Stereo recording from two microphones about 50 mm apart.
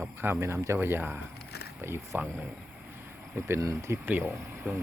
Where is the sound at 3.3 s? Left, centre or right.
Right.